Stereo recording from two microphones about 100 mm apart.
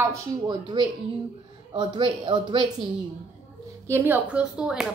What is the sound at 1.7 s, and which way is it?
Speech, 60° right (ahead or behind).